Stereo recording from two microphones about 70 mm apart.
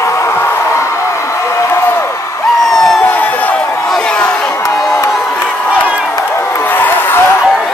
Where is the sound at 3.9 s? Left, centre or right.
Centre.